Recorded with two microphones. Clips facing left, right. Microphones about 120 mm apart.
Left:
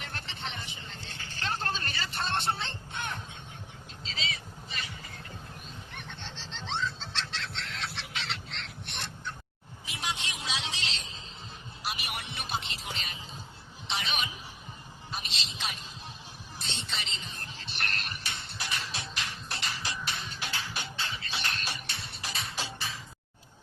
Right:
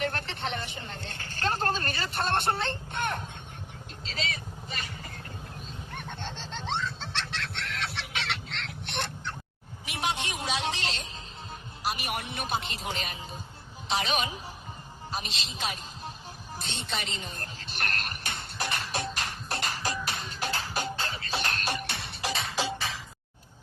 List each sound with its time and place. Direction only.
0.0 s vehicle: 60° right (ahead or behind)
5.9 s fowl: 50° right (ahead or behind); by 9.3 s 70° right (ahead or behind)
9.8 s vehicle: 60° right (ahead or behind)
11.8 s music: 45° right (ahead or behind)
15.1 s a sound: 40° right (ahead or behind)
16.6 s music: 45° right (ahead or behind); by 23.0 s 90° right